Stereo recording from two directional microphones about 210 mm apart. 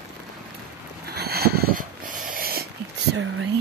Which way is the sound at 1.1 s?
50° right (ahead or behind).